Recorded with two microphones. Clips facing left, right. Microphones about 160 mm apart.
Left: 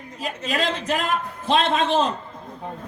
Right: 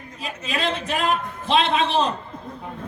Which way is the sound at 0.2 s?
45° left (ahead or behind).